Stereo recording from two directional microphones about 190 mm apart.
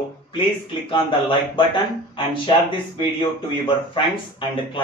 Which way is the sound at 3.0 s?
25° left (ahead or behind).